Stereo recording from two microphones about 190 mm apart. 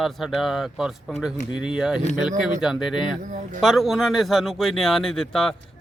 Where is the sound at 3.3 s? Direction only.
45° right (ahead or behind).